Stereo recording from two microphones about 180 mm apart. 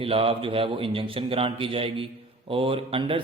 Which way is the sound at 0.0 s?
30° right (ahead or behind).